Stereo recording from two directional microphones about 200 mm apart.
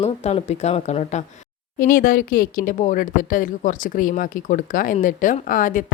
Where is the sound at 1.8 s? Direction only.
45° left (ahead or behind).